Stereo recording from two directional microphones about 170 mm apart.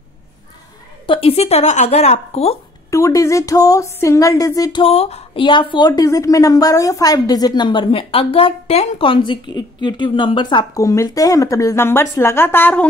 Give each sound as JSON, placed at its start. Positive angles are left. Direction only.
{"t": 1.0, "sound": "a woman's voice", "side_deg": 35}
{"t": 2.9, "sound": "a woman's voice", "side_deg": 20}
{"t": 4.8, "sound": "a woman's voice", "side_deg": 35}